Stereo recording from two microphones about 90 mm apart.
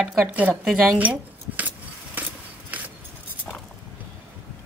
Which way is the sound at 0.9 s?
20° right (ahead or behind).